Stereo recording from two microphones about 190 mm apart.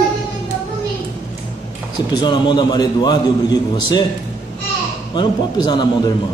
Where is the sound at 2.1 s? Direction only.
25° left (ahead or behind).